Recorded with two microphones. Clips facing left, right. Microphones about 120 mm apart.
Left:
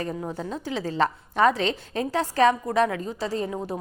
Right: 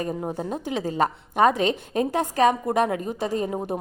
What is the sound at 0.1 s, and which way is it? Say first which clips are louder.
Speech: right 3 dB; 45° right (ahead or behind).